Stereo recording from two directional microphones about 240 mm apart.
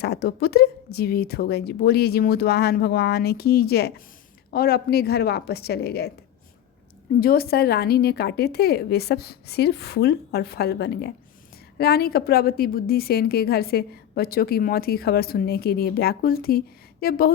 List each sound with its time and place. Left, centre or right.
0.0 s a woman's voice: left
7.2 s a woman's voice: left